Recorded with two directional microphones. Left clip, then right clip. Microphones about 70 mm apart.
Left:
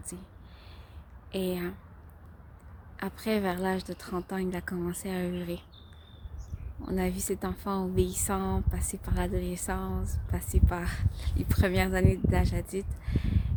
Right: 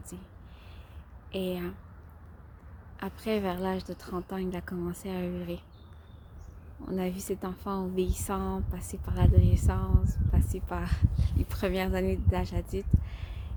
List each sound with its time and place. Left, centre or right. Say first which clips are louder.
1.3 s a woman's voice: left 1 dB; left
3.0 s a woman's voice: left 1 dB; left
6.8 s a woman's voice: left 1 dB; left